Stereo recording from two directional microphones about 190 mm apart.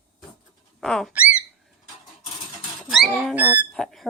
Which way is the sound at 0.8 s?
5° left (ahead or behind).